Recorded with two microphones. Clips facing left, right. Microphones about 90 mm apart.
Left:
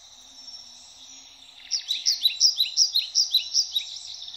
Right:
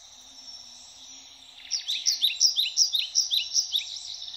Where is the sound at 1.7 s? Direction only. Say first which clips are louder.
Left 1 dB; 5° left (ahead or behind).